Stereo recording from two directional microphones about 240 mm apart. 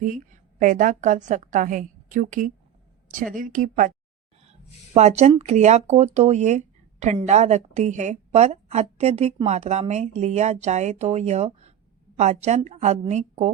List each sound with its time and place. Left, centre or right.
0.6 s a woman's voice: right
4.9 s a woman's voice: right